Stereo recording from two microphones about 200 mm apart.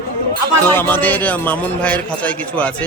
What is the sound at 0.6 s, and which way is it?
A man's voice, 10° left (ahead or behind).